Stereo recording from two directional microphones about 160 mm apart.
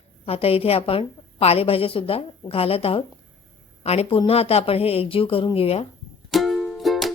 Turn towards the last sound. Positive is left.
turn(degrees=0)  # may be behind; listen again after turning